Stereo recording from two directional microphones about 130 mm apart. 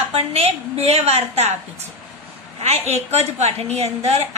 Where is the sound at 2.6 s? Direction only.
55° right (ahead or behind).